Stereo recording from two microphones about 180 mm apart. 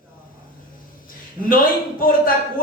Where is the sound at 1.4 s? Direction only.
50° left (ahead or behind).